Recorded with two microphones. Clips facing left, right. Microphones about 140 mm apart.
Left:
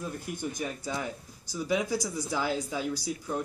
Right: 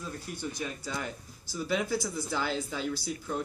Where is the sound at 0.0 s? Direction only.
15° left (ahead or behind).